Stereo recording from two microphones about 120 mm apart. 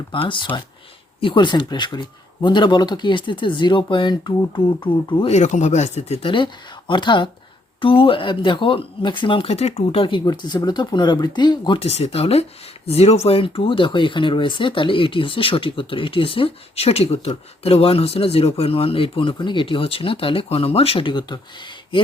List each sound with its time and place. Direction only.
0.1 s speech: 45° left (ahead or behind)
5.3 s speech: 80° left; by 6.3 s 60° left (ahead or behind)
6.3 s speech: 45° left (ahead or behind)
11.9 s speech: 65° left (ahead or behind); by 21.3 s 40° left (ahead or behind)